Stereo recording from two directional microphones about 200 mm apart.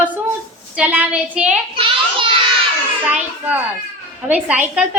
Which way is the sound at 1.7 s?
25° right (ahead or behind).